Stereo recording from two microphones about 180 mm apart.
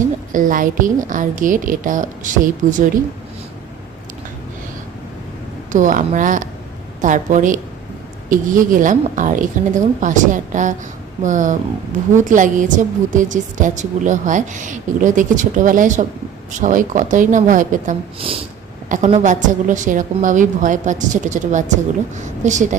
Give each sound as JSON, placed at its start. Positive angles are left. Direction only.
{"t": 0.3, "sound": "a woman's voice", "side_deg": -50}
{"t": 5.7, "sound": "a woman's voice", "side_deg": -45}
{"t": 18.3, "sound": "a woman's voice", "side_deg": -30}
{"t": 18.9, "sound": "a woman's voice", "side_deg": -40}